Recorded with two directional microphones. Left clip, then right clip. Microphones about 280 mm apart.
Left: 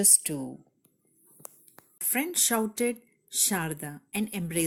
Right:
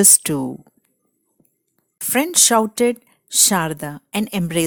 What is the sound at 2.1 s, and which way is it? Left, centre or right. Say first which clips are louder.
A woman's voice: right 12 dB; right.